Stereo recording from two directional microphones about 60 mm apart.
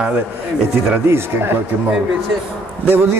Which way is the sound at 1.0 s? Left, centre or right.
Right.